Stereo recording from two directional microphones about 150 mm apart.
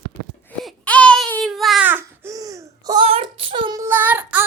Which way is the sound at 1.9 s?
15° right (ahead or behind).